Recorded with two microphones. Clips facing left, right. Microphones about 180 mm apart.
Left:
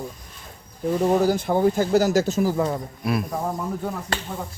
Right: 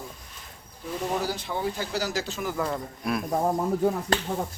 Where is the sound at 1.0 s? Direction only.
50° left (ahead or behind); by 2.6 s 30° left (ahead or behind).